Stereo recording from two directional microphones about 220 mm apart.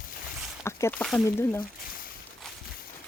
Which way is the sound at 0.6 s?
10° left (ahead or behind).